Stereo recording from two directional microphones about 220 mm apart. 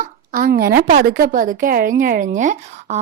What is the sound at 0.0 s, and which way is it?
Speech, 40° right (ahead or behind).